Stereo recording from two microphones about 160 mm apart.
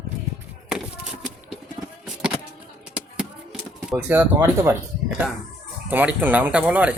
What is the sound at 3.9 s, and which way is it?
Speech, 10° right (ahead or behind).